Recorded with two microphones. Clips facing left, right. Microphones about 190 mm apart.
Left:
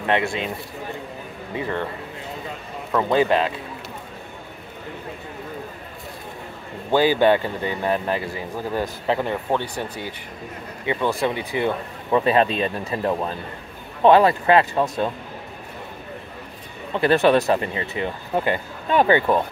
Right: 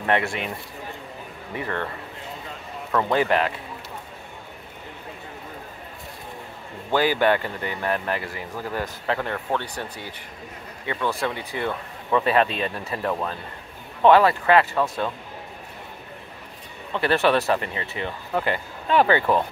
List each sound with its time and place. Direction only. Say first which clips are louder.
0.0 s speech: left 2 dB; 20° left (ahead or behind)
1.5 s speech: left 3 dB; 15° left (ahead or behind)
2.9 s speech: left 3 dB; 15° left (ahead or behind)
6.9 s speech: left 4 dB; 20° left (ahead or behind)
16.9 s speech: left 4 dB; 15° left (ahead or behind)